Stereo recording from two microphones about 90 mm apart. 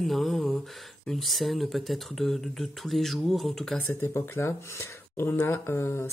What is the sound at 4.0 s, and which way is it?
Speech, 25° left (ahead or behind).